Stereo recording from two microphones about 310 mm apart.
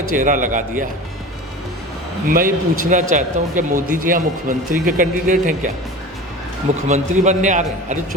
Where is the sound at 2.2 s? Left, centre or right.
Right.